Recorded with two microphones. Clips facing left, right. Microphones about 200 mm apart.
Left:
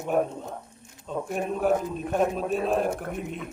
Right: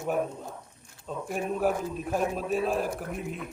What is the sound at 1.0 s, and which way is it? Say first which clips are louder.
A man's voice: left 2 dB; centre (ahead or behind).